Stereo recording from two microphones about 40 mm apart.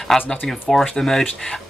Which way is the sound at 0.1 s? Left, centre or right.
Centre.